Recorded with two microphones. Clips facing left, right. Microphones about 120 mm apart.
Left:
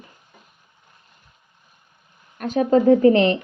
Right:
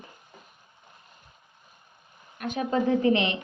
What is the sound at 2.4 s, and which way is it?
Speech, 40° left (ahead or behind).